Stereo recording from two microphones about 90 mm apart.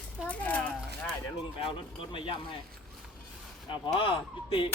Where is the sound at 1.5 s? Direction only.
70° left (ahead or behind).